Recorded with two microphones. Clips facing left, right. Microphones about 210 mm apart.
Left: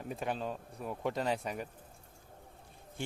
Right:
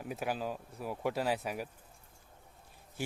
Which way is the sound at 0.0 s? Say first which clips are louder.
Right 1 dB; 5° right (ahead or behind).